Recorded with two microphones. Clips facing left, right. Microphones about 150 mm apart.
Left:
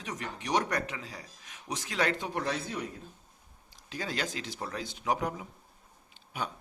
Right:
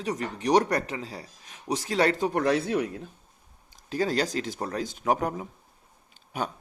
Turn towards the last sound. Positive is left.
turn(degrees=-45)  # may be behind; listen again after turning